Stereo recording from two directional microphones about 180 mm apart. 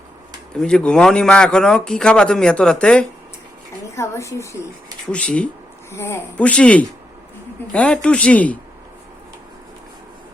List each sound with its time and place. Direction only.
0.5 s a man's voice: 5° left (ahead or behind)
3.9 s speech: 15° left (ahead or behind)